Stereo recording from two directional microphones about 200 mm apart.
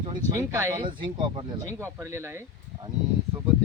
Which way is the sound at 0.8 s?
25° right (ahead or behind).